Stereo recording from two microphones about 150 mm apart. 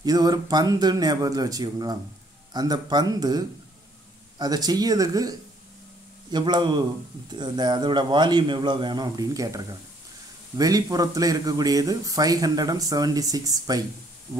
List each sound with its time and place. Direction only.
0.0 s speech: 25° right (ahead or behind)
6.3 s speech: 30° right (ahead or behind)